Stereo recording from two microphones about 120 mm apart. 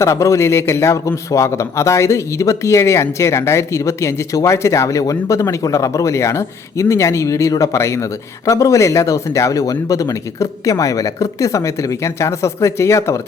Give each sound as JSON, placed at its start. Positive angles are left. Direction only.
{"t": 0.0, "sound": "a man's voice", "side_deg": 25}